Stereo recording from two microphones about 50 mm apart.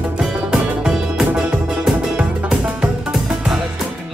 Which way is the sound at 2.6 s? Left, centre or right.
Right.